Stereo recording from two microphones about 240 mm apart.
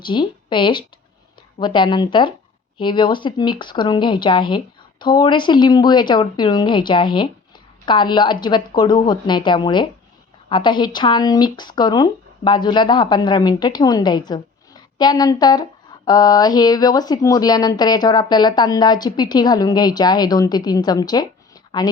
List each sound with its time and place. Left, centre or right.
0.0 s speech: centre